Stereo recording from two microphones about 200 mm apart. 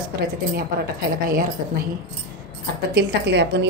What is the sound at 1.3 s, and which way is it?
Speech, 45° right (ahead or behind).